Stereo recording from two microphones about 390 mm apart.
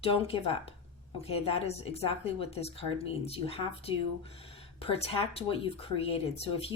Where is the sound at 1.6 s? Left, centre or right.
Centre.